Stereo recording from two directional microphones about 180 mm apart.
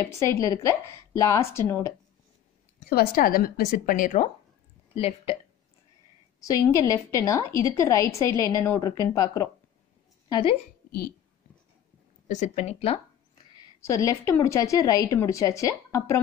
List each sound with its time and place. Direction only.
0.0 s a woman's voice: 15° left (ahead or behind)
2.9 s a woman's voice: 55° left (ahead or behind)
4.9 s speech: 30° left (ahead or behind)
6.4 s a woman's voice: 15° left (ahead or behind)
10.9 s speech: 55° left (ahead or behind)
12.3 s speech: 40° left (ahead or behind)
13.7 s a woman's voice: 15° left (ahead or behind)